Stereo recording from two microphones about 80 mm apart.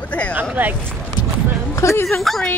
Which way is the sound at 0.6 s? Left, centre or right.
Right.